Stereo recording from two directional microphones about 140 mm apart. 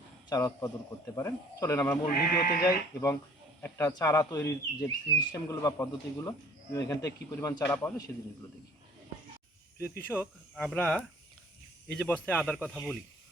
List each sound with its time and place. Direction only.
0.3 s a man's voice: 25° left (ahead or behind)
2.0 s speech: 90° left
2.6 s a man's voice: 25° left (ahead or behind)
7.7 s speech: 10° left (ahead or behind)
9.8 s speech: 15° left (ahead or behind)
12.6 s a man's voice: centre (ahead or behind)